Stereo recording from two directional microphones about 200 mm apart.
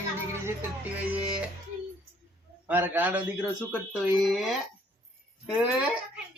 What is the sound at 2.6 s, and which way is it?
Speech, 10° right (ahead or behind).